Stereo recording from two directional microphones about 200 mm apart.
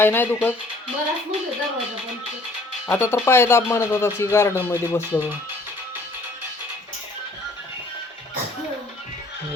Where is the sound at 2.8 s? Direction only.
10° left (ahead or behind).